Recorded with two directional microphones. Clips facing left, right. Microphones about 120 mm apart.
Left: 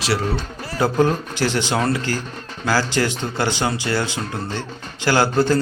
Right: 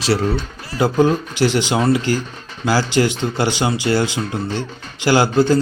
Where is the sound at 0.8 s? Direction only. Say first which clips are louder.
Right 3 dB; 15° right (ahead or behind).